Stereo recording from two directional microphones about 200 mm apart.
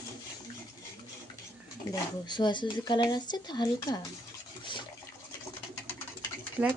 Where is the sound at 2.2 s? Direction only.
20° left (ahead or behind).